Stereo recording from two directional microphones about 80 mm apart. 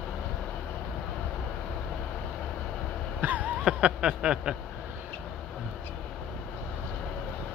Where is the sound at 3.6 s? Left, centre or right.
Centre.